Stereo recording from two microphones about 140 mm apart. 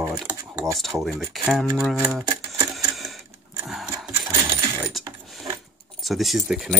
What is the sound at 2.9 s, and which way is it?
Cash register, centre (ahead or behind).